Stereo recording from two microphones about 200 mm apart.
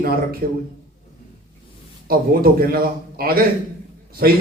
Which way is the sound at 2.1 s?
50° right (ahead or behind).